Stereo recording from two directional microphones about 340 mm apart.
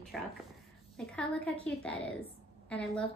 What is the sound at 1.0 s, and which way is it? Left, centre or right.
A woman's voice, centre.